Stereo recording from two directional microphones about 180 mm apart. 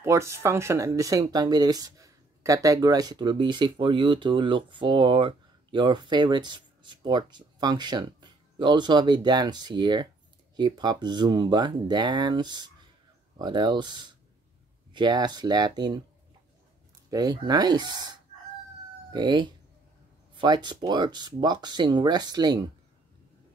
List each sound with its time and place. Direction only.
0.0 s speech: 15° right (ahead or behind)
17.1 s speech: 20° right (ahead or behind)